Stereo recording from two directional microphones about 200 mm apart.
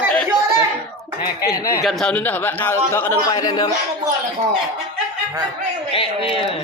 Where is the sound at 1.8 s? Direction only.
Centre (ahead or behind); by 3.7 s 20° left (ahead or behind).